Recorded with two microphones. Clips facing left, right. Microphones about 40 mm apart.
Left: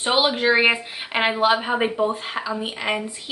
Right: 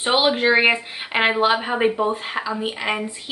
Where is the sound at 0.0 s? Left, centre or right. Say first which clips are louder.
Right 1 dB; centre.